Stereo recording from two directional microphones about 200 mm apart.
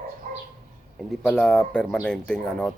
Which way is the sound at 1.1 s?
5° left (ahead or behind).